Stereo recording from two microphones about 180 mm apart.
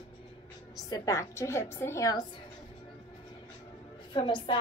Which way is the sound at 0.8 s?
20° left (ahead or behind).